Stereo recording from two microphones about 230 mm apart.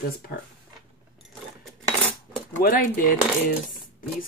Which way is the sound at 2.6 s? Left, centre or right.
Left.